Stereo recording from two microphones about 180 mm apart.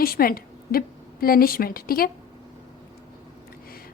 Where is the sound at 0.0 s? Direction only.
55° left (ahead or behind).